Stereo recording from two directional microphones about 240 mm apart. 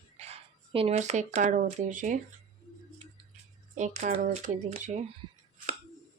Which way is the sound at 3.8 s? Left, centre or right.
Right.